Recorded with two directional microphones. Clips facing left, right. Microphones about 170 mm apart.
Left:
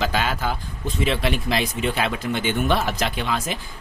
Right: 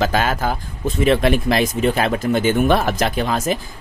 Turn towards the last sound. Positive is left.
turn(degrees=-45)  # may be behind; listen again after turning